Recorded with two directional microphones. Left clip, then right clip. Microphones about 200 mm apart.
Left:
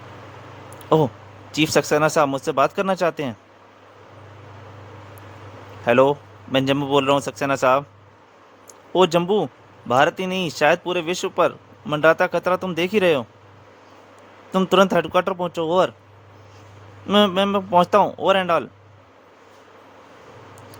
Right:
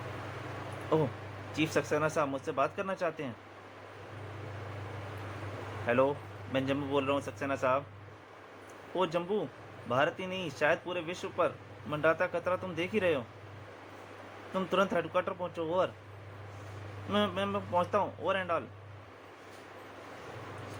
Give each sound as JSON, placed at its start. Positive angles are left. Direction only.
{"t": 1.5, "sound": "speech", "side_deg": 60}
{"t": 5.8, "sound": "speech", "side_deg": 60}
{"t": 9.0, "sound": "speech", "side_deg": 60}
{"t": 14.5, "sound": "speech", "side_deg": 60}
{"t": 17.1, "sound": "speech", "side_deg": 60}